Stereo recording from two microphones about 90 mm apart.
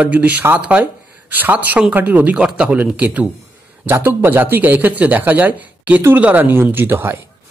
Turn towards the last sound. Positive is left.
turn(degrees=-20)  # may be behind; listen again after turning